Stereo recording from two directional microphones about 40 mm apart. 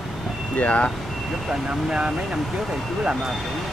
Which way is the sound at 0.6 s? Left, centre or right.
Left.